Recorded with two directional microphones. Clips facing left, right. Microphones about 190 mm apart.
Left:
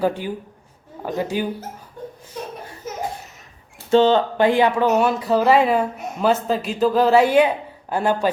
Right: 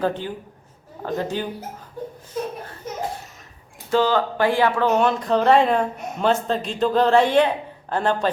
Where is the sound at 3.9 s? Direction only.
25° left (ahead or behind).